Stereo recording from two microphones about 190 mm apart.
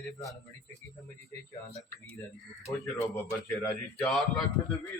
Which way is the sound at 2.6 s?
15° left (ahead or behind).